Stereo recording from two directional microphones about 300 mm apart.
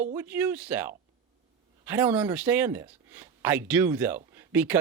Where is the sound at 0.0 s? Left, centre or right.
Centre.